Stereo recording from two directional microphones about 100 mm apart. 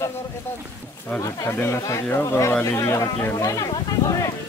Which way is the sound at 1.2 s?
30° left (ahead or behind).